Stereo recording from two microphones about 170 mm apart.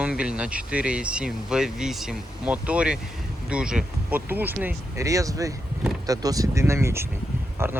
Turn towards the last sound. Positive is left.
turn(degrees=-15)  # may be behind; listen again after turning